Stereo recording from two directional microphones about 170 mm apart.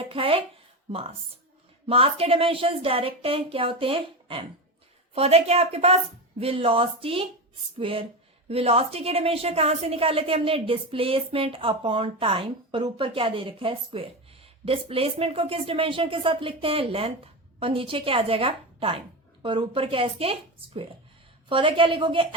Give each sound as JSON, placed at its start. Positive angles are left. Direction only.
{"t": 0.0, "sound": "a woman's voice", "side_deg": -30}